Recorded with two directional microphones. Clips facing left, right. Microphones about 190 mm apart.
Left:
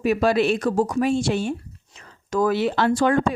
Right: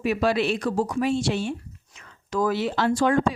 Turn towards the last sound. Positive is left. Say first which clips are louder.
# left 2 dB
turn(degrees=65)  # may be behind; listen again after turning